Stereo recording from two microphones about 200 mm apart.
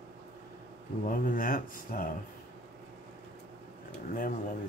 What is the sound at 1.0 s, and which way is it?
Speech, 45° left (ahead or behind).